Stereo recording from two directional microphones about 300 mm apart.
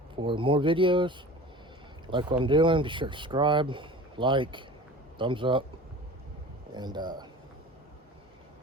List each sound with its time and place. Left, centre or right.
0.2 s speech: centre
2.4 s speech: centre
6.7 s speech: centre